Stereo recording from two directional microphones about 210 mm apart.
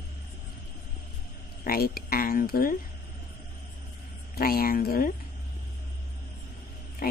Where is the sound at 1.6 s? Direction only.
45° left (ahead or behind).